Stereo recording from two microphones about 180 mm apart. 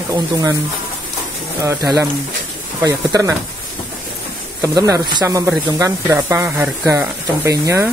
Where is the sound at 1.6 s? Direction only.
15° right (ahead or behind).